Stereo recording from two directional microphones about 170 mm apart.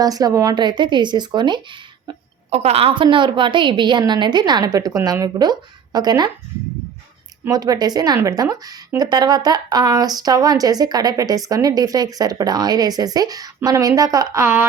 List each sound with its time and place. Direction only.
0.0 s speech: 20° right (ahead or behind)
2.0 s speech: 40° right (ahead or behind)
7.4 s speech: 20° right (ahead or behind)